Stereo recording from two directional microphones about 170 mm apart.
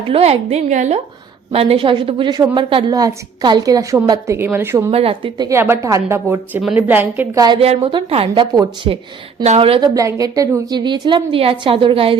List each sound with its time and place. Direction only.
0.1 s a woman's voice: 40° right (ahead or behind); by 4.9 s 15° right (ahead or behind)
4.9 s a woman's voice: 35° right (ahead or behind)
5.5 s a woman's voice: 15° right (ahead or behind)
7.4 s a woman's voice: 30° right (ahead or behind)
9.9 s a woman's voice: 20° right (ahead or behind)